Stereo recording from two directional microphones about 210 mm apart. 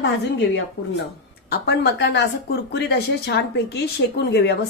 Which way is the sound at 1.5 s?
50° left (ahead or behind).